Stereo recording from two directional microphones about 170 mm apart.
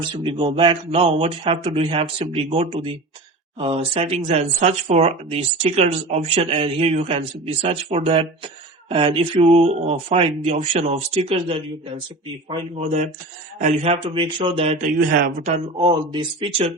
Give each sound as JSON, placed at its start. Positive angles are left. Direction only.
{"t": 0.2, "sound": "speech", "side_deg": -30}
{"t": 15.9, "sound": "speech", "side_deg": -30}